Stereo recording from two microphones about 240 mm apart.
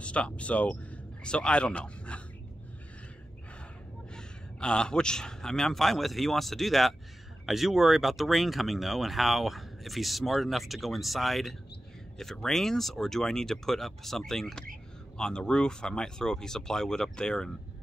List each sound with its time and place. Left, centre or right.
0.0 s speech: centre
4.1 s speech: centre